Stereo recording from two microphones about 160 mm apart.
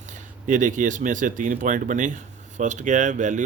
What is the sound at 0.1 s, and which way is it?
Speech, 55° right (ahead or behind).